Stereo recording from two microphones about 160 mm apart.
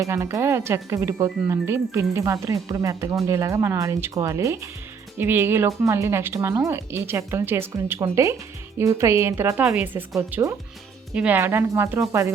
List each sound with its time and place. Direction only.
0.0 s speech: 20° right (ahead or behind)